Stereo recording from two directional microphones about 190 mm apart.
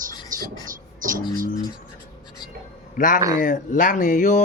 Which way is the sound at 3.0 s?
45° left (ahead or behind).